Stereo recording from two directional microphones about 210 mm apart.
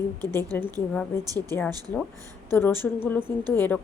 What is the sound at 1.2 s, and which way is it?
Speech, 15° right (ahead or behind).